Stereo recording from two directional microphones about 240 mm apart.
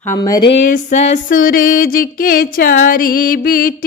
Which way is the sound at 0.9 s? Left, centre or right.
Left.